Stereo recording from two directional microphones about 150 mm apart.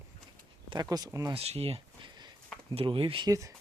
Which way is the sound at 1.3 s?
40° right (ahead or behind).